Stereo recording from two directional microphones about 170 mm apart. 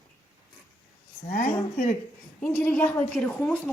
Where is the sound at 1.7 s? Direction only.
40° left (ahead or behind).